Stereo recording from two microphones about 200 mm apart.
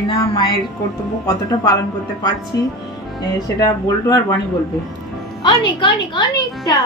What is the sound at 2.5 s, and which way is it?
Speech, 15° left (ahead or behind).